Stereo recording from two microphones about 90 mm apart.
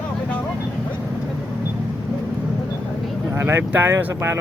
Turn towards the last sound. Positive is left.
turn(degrees=-30)  # may be behind; listen again after turning